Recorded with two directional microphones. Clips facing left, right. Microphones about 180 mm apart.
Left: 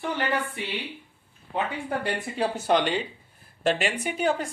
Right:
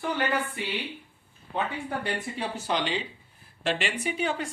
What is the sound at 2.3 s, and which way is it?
Speech, 50° left (ahead or behind).